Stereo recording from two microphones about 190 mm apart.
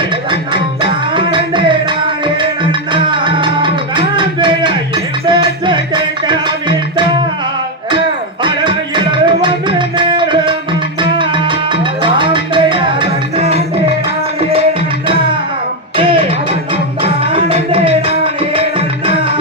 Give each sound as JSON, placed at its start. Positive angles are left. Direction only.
{"t": 0.3, "sound": "music", "side_deg": -25}
{"t": 2.9, "sound": "music", "side_deg": -25}
{"t": 8.4, "sound": "music", "side_deg": -25}
{"t": 17.0, "sound": "music", "side_deg": -30}